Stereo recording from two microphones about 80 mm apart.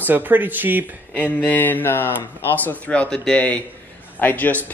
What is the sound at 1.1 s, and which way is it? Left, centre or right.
A man's voice, left.